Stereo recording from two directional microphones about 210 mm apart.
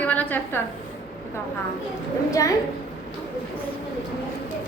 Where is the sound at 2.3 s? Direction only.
15° left (ahead or behind).